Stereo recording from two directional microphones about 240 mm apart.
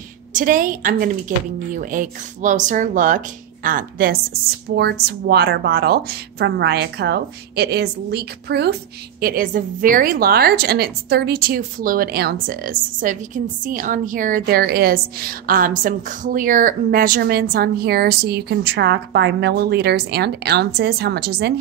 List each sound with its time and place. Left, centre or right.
0.3 s a woman's voice: right